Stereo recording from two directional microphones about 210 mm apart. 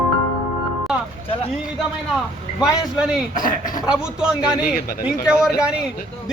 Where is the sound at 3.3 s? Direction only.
20° left (ahead or behind).